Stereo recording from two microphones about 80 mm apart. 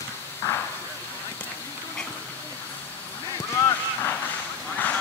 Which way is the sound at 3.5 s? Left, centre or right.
Left.